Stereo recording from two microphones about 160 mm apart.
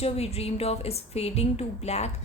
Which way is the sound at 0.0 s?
40° left (ahead or behind).